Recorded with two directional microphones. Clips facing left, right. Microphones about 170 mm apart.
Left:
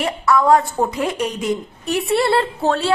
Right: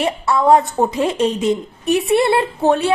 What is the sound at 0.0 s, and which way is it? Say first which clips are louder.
A woman's voice: even; 25° right (ahead or behind).